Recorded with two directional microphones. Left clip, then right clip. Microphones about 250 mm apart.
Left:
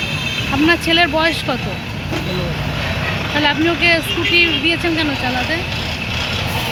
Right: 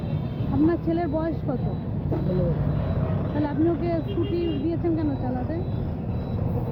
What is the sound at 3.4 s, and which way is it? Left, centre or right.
Speech, left.